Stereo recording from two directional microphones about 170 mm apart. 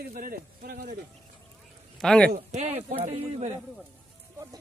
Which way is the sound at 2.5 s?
40° right (ahead or behind).